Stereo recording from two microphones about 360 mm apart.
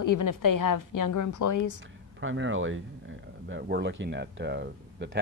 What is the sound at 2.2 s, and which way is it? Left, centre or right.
Speech, right.